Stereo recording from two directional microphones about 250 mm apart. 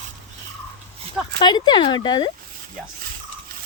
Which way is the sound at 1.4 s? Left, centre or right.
Centre.